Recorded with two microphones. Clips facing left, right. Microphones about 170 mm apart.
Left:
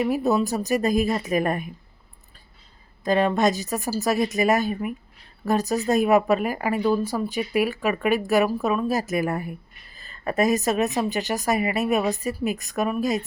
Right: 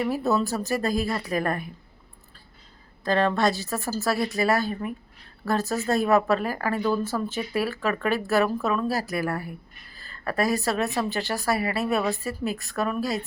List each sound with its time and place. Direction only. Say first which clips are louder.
0.0 s a woman's voice: left 3 dB; 15° left (ahead or behind)
3.0 s speech: left 2 dB; 15° left (ahead or behind)